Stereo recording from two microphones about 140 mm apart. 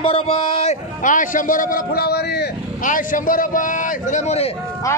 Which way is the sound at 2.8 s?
70° left (ahead or behind).